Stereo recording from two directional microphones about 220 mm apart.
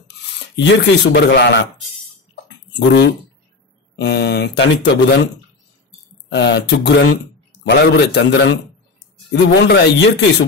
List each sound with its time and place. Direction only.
0.6 s speech: 55° left (ahead or behind)
2.4 s a sound: 50° left (ahead or behind)
3.9 s speech: 50° left (ahead or behind)
6.3 s speech: 50° left (ahead or behind)